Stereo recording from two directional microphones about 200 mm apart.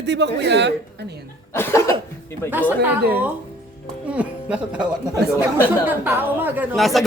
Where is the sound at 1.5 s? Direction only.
10° left (ahead or behind).